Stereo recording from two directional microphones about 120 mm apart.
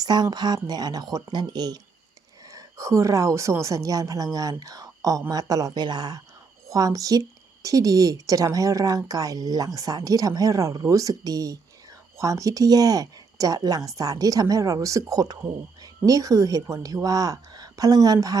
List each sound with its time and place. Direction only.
0.0 s a woman's voice: 35° right (ahead or behind)